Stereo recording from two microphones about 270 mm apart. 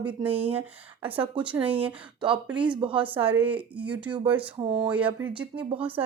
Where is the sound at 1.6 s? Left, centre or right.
Right.